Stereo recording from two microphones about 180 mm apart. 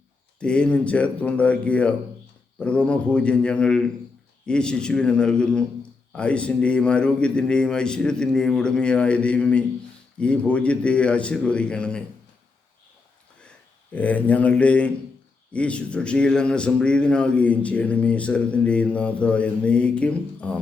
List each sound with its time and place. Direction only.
0.3 s a man's voice: 5° left (ahead or behind)
13.9 s speech: 10° left (ahead or behind)